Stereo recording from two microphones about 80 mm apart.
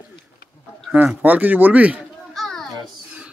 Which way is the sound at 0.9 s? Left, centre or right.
Right.